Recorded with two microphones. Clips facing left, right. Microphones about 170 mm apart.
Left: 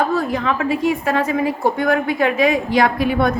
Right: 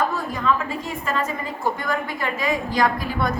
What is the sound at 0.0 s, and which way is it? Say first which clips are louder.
A woman's voice: left 5 dB; 75° left (ahead or behind).